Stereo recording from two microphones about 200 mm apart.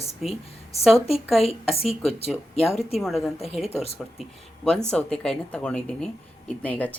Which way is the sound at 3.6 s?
30° left (ahead or behind).